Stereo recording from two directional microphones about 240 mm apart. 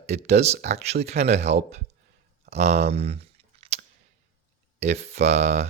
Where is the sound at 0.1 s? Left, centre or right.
Right.